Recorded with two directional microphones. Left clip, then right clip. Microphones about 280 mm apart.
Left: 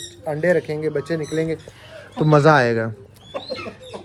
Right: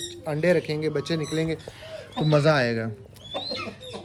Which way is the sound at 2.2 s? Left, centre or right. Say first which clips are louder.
Left 7 dB; centre.